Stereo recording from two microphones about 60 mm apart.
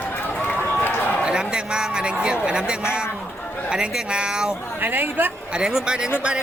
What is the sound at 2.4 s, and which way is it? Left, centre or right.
Speech, centre.